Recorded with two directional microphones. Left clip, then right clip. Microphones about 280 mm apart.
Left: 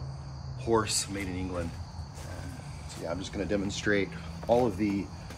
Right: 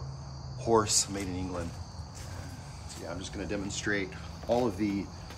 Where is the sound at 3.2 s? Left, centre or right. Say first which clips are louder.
Left 4 dB; centre.